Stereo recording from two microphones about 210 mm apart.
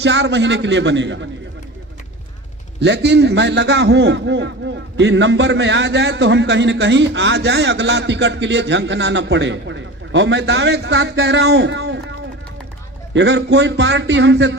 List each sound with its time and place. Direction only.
0.0 s a man's voice: 55° right (ahead or behind)
2.8 s a man's voice: 55° right (ahead or behind)
13.1 s a man's voice: 55° right (ahead or behind)